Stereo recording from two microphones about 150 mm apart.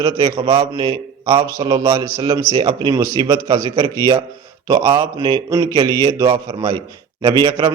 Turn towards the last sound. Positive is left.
turn(degrees=-25)  # may be behind; listen again after turning